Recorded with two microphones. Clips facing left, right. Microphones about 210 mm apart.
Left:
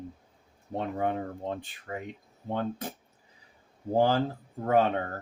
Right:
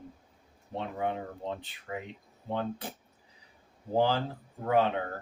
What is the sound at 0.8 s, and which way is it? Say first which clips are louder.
Speech: left 3 dB; 45° left (ahead or behind).